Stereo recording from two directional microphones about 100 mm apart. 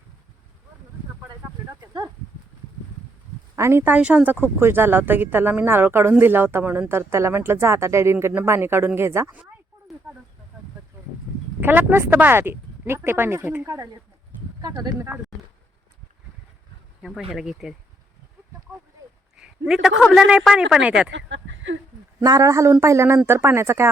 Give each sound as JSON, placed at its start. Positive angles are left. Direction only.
{"t": 1.7, "sound": "speech", "side_deg": -40}
{"t": 3.5, "sound": "speech", "side_deg": -25}
{"t": 3.9, "sound": "a woman's voice", "side_deg": -15}
{"t": 11.6, "sound": "a woman's voice", "side_deg": -20}
{"t": 13.7, "sound": "speech", "side_deg": -35}
{"t": 17.0, "sound": "speech", "side_deg": -5}
{"t": 18.7, "sound": "a sound", "side_deg": -15}
{"t": 19.4, "sound": "a man's voice", "side_deg": -5}
{"t": 22.2, "sound": "a woman's voice", "side_deg": -35}